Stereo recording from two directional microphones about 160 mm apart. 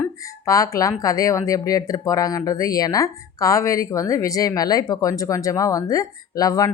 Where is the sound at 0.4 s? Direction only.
20° left (ahead or behind).